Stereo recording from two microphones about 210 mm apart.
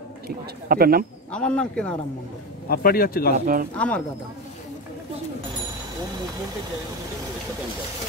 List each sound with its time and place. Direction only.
0.7 s speech: 45° right (ahead or behind)
1.3 s speech: 5° left (ahead or behind)
2.7 s speech: 45° left (ahead or behind)
3.3 s speech: 40° right (ahead or behind)
3.7 s speech: 5° left (ahead or behind)